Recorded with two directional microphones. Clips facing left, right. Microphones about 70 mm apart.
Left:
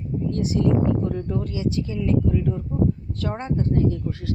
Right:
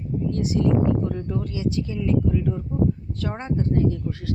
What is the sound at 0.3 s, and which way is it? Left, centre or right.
Speech, centre.